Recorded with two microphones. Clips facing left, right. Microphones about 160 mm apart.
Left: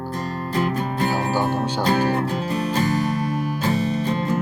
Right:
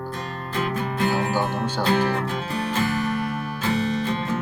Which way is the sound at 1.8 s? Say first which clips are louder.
Left 1 dB; 40° left (ahead or behind).